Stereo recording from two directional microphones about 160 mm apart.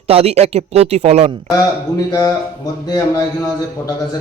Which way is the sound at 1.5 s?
25° left (ahead or behind).